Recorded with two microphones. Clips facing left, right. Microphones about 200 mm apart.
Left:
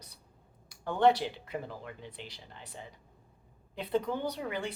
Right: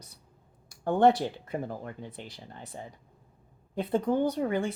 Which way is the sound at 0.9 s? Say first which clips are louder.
Right 3 dB; 45° right (ahead or behind).